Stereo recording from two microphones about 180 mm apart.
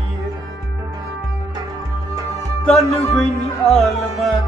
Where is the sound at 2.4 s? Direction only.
Centre (ahead or behind).